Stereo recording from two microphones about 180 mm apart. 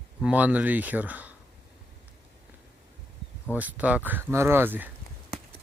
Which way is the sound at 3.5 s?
10° right (ahead or behind).